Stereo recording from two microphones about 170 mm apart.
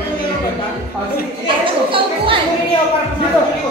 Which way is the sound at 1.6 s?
30° right (ahead or behind).